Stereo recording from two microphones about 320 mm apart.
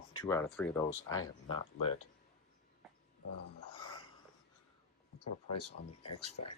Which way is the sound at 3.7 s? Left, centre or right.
Centre.